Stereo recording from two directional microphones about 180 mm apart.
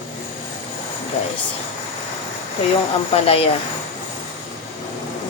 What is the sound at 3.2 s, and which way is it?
Speech, 30° left (ahead or behind).